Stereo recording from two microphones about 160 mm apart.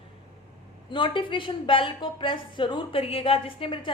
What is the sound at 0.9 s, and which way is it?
A woman's voice, 30° left (ahead or behind).